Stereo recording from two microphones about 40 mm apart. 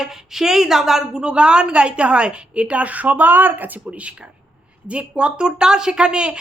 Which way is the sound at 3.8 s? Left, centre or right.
Right.